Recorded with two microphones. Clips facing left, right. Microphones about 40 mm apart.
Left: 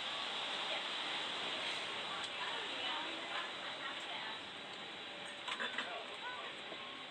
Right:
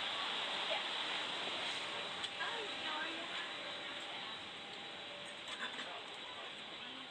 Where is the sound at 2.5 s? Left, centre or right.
Left.